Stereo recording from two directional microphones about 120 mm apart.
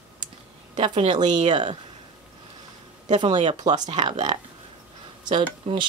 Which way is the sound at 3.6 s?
35° right (ahead or behind).